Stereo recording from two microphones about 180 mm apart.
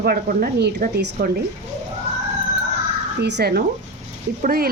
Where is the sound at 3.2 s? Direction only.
65° right (ahead or behind).